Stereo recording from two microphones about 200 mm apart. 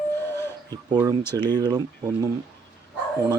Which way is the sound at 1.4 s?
20° right (ahead or behind).